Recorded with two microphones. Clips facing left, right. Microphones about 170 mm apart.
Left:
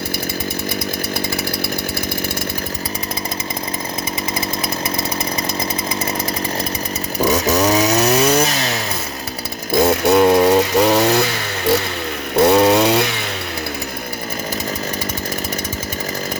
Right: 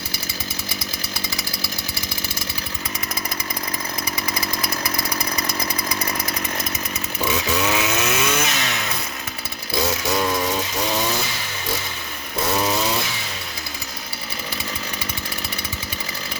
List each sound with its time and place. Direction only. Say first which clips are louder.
7.3 s chainsaw: left 7 dB; 40° left (ahead or behind)
9.7 s a sound: left 9 dB; 55° left (ahead or behind)
12.4 s chainsaw: left 10 dB; 65° left (ahead or behind)